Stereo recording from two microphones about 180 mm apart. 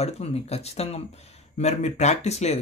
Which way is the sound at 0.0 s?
35° left (ahead or behind).